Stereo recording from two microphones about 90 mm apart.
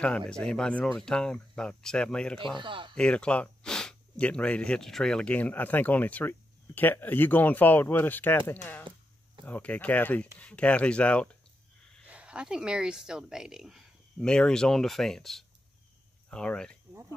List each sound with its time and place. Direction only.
0.3 s speech: 10° left (ahead or behind)
2.4 s speech: 65° right (ahead or behind)
3.0 s speech: 10° left (ahead or behind)
8.9 s a sound: 65° right (ahead or behind)
9.5 s speech: 15° left (ahead or behind)
12.1 s speech: 15° right (ahead or behind)
14.1 s speech: 10° left (ahead or behind)